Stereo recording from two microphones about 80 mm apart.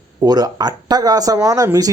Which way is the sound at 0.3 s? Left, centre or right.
Right.